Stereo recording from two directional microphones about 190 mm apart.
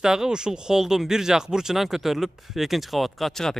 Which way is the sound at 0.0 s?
5° right (ahead or behind).